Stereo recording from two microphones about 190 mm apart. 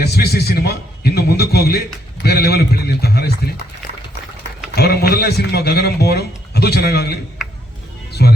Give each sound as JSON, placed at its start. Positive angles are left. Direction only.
{"t": 0.0, "sound": "a man's voice", "side_deg": 60}
{"t": 4.7, "sound": "speech", "side_deg": 55}
{"t": 8.2, "sound": "a man's voice", "side_deg": 55}